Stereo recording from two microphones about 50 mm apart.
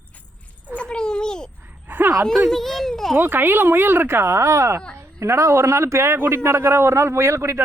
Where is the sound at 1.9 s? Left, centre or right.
Right.